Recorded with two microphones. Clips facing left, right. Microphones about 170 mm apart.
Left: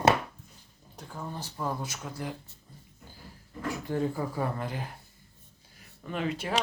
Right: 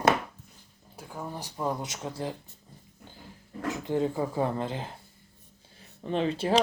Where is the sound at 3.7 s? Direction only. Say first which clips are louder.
Right 2 dB; 20° right (ahead or behind).